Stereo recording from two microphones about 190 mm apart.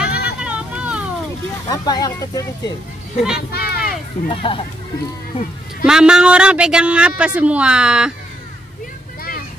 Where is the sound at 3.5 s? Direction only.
55° left (ahead or behind).